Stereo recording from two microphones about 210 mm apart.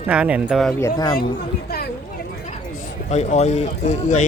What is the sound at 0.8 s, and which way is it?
Speech, 15° left (ahead or behind).